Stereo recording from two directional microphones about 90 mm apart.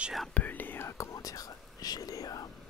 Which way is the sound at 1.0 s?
40° left (ahead or behind).